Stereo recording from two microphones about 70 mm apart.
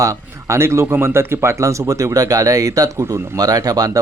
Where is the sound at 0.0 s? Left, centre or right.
Right.